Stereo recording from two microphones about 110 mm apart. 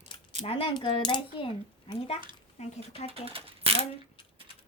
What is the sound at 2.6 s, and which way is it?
Speech, 65° left (ahead or behind).